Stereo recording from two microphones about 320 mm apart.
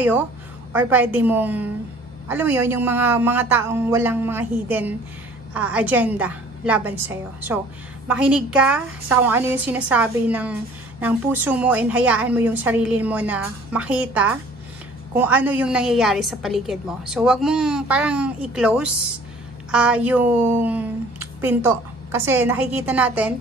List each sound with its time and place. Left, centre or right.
0.7 s a woman's voice: centre